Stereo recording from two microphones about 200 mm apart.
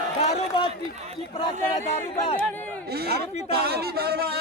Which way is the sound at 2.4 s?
10° left (ahead or behind).